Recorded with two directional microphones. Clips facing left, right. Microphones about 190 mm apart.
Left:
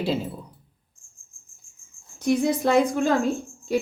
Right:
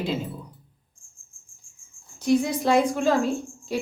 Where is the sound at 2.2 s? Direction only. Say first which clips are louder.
Even; 50° left (ahead or behind).